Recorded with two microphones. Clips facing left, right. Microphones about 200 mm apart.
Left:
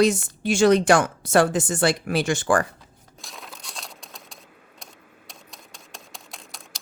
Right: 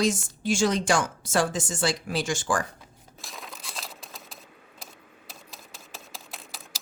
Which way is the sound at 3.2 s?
Centre (ahead or behind).